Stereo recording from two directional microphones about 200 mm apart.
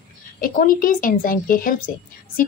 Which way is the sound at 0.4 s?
45° left (ahead or behind).